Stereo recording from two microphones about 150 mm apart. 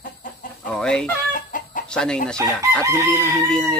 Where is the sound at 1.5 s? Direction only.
60° left (ahead or behind).